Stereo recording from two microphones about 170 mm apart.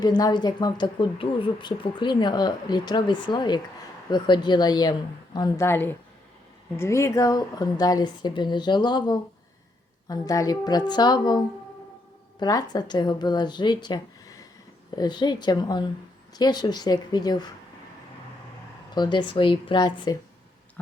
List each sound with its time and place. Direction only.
0.0 s speech: 25° left (ahead or behind)
18.9 s speech: 25° left (ahead or behind)
20.8 s a sound: 10° left (ahead or behind)